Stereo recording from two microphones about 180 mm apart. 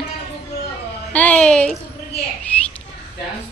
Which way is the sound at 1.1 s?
10° left (ahead or behind).